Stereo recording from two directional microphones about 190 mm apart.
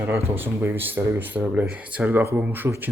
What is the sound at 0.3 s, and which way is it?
Speech, 10° right (ahead or behind).